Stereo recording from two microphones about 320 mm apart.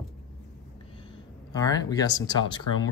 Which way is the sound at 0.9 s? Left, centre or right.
Centre.